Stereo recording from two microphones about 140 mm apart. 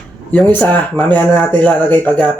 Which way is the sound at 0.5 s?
10° left (ahead or behind).